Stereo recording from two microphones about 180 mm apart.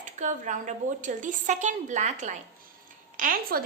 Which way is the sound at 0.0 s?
45° right (ahead or behind).